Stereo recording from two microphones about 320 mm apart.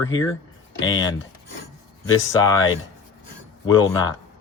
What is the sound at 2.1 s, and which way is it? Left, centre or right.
Speech, left.